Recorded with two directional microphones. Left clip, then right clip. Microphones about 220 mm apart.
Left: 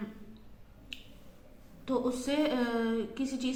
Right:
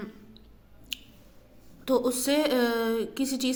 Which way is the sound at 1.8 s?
45° right (ahead or behind).